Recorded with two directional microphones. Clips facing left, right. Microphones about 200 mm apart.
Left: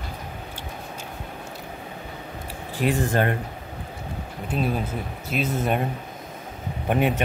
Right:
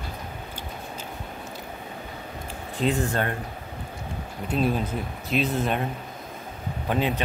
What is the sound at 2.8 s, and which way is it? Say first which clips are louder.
Speech: left 1 dB; 15° left (ahead or behind).